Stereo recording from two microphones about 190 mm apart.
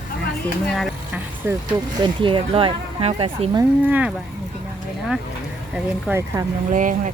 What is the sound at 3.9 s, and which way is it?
Speech, 5° right (ahead or behind).